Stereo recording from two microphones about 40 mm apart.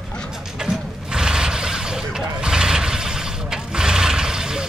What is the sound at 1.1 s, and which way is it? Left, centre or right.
Mechanisms, centre.